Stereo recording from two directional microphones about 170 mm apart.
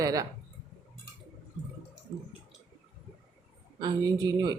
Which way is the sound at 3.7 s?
25° right (ahead or behind).